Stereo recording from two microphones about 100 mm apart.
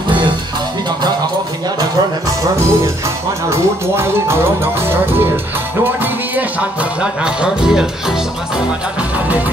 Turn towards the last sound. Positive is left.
turn(degrees=-5)  # may be behind; listen again after turning